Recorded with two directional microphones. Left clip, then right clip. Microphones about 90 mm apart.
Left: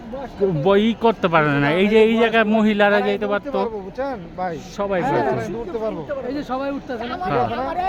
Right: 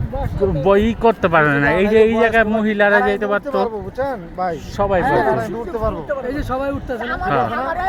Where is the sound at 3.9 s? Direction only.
40° right (ahead or behind).